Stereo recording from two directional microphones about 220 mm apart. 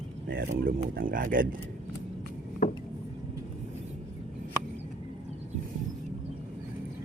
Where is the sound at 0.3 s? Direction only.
40° right (ahead or behind).